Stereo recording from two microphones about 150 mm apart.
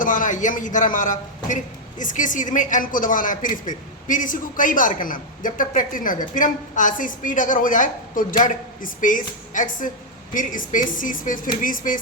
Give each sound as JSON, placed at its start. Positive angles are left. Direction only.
{"t": 0.0, "sound": "a man's voice", "side_deg": 60}